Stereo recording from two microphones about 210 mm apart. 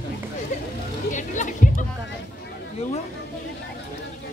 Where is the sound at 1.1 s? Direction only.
35° left (ahead or behind).